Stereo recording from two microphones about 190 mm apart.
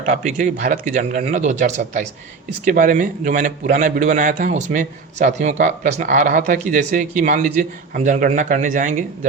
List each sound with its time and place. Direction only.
0.0 s a man's voice: 45° right (ahead or behind)